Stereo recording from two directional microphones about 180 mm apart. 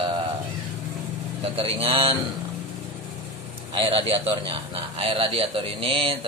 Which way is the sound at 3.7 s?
30° right (ahead or behind).